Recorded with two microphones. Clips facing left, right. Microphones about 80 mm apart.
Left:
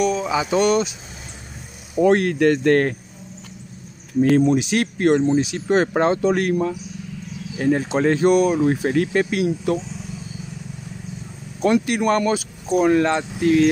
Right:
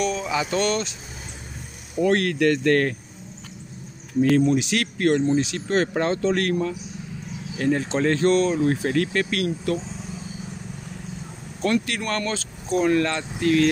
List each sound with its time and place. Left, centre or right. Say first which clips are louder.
0.0 s a sound: left 5 dB; centre
0.3 s speech: left 6 dB; centre
2.0 s speech: left 4 dB; left
4.5 s speech: left 3 dB; left
11.6 s speech: left 6 dB; centre